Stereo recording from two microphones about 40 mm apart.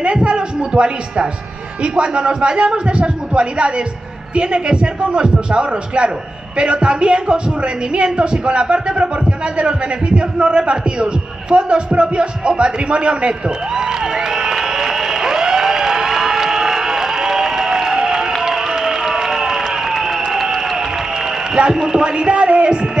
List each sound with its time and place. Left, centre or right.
0.0 s a woman's voice: right
13.7 s a sound: centre
21.7 s a woman's voice: centre